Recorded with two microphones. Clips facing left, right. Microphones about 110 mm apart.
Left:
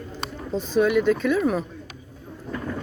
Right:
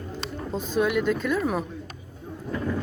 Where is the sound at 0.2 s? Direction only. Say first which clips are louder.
Left 4 dB; 50° left (ahead or behind).